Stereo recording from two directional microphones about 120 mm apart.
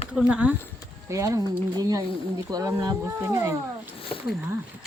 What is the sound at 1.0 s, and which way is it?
Speech, 25° right (ahead or behind).